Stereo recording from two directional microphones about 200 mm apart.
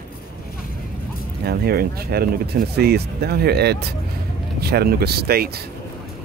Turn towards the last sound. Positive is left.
turn(degrees=-50)  # may be behind; listen again after turning